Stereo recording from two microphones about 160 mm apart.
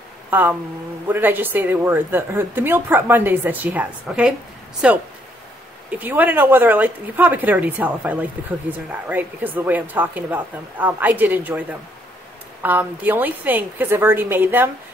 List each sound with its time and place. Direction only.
0.3 s speech: 10° right (ahead or behind)
12.6 s speech: 10° right (ahead or behind)